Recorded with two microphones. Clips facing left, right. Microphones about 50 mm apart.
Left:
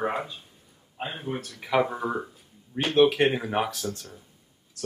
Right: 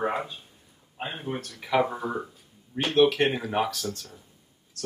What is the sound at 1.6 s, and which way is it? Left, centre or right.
Speech, centre.